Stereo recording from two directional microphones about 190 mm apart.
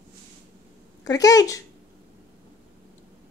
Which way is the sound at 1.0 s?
20° left (ahead or behind).